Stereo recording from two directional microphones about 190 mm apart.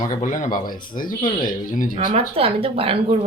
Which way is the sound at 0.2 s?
40° left (ahead or behind).